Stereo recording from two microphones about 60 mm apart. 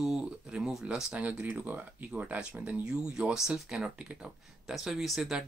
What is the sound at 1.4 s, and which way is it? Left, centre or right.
Speech, right.